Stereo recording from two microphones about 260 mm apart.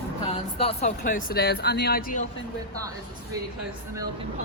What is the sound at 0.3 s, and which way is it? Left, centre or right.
Speech, left.